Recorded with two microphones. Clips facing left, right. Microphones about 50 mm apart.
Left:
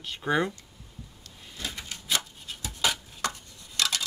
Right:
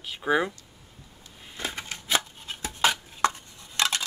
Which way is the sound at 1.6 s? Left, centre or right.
Right.